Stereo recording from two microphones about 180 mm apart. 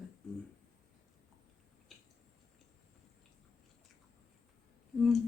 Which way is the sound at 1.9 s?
Centre (ahead or behind).